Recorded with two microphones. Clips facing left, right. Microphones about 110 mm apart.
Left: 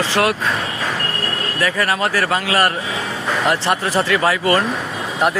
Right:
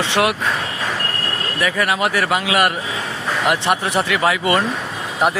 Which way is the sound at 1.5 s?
10° right (ahead or behind).